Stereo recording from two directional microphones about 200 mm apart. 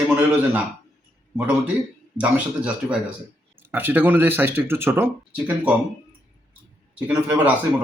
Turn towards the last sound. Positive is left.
turn(degrees=-5)  # may be behind; listen again after turning